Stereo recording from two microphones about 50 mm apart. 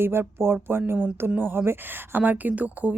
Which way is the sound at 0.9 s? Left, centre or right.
Right.